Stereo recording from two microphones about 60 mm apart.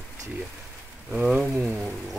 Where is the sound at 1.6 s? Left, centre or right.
Centre.